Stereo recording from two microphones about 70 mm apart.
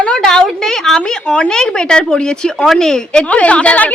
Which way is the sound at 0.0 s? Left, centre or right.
Centre.